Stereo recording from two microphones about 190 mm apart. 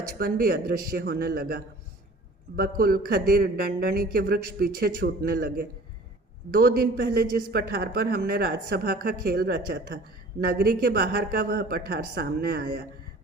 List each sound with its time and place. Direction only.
0.2 s a man's voice: 50° right (ahead or behind)